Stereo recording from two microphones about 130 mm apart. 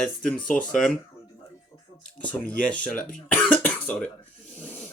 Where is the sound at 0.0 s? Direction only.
5° left (ahead or behind).